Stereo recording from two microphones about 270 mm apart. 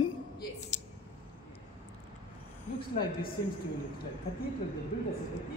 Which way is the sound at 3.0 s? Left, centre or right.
Left.